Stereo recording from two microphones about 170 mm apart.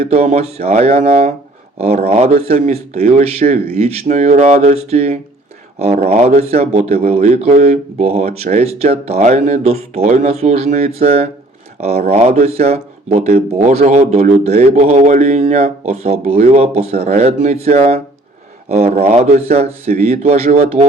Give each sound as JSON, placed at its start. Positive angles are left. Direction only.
{"t": 0.0, "sound": "speech", "side_deg": -40}